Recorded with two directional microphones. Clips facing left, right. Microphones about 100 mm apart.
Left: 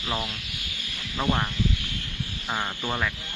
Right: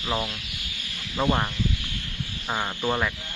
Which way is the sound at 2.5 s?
10° right (ahead or behind).